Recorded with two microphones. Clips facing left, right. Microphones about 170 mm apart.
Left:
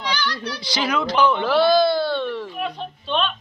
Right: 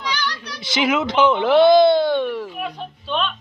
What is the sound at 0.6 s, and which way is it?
Speech, 20° right (ahead or behind).